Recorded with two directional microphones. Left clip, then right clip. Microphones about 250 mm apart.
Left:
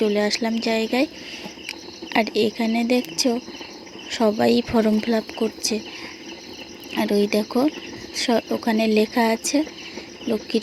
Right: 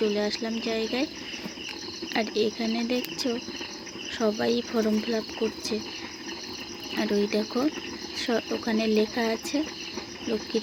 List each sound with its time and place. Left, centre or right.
0.0 s speech: left
2.1 s speech: left
6.9 s speech: left